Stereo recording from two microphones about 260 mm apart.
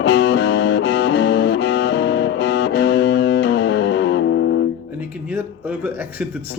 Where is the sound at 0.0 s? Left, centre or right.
Left.